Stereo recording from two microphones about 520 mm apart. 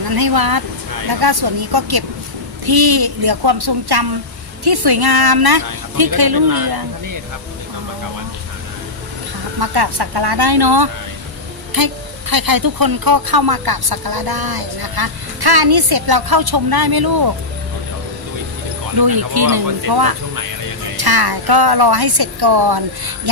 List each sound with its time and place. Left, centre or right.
0.1 s speech: right
9.6 s speech: right
18.9 s speech: right